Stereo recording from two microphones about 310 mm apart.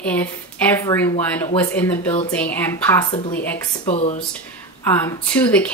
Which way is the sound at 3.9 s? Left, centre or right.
Left.